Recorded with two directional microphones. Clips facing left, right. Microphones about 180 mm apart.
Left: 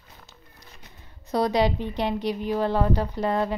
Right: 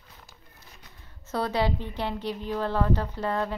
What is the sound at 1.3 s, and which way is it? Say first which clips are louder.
Speech: left 5 dB; 15° left (ahead or behind).